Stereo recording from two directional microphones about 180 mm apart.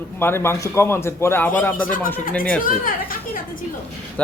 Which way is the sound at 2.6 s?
50° left (ahead or behind).